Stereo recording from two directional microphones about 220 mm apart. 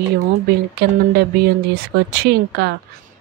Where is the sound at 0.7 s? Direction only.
45° right (ahead or behind).